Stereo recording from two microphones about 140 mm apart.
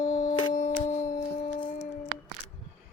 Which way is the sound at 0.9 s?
75° left (ahead or behind).